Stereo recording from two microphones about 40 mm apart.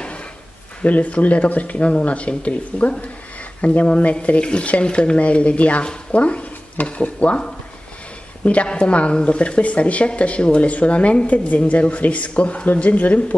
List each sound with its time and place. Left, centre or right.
0.8 s speech: left
8.6 s speech: left